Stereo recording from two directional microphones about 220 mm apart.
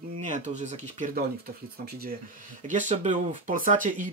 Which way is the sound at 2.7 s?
35° right (ahead or behind).